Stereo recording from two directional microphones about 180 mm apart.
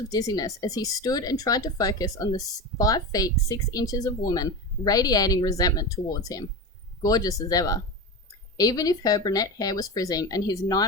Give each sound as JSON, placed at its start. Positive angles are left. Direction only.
{"t": 0.1, "sound": "speech", "side_deg": 20}